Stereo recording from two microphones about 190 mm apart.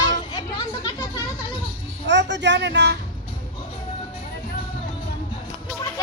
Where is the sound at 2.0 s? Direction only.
70° right (ahead or behind).